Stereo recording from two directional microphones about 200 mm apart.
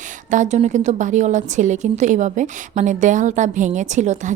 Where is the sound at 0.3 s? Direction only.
35° right (ahead or behind).